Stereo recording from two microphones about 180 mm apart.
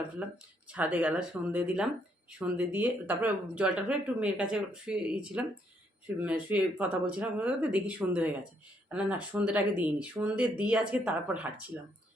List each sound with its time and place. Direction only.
0.7 s speech: 5° right (ahead or behind)